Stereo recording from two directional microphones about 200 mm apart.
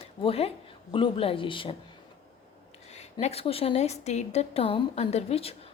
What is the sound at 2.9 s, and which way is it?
A woman's voice, 35° left (ahead or behind).